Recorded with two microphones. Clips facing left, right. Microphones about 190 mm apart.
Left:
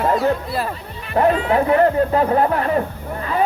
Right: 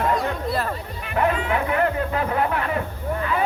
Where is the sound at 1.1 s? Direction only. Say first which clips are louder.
Left 6 dB; 35° left (ahead or behind).